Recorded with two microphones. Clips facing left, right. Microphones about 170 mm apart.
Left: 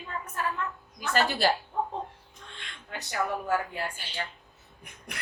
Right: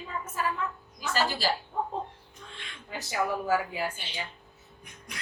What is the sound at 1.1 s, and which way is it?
Speech, 60° left (ahead or behind).